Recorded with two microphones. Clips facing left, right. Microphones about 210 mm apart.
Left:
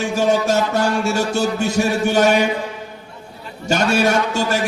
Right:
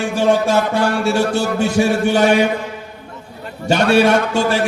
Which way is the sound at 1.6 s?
45° left (ahead or behind).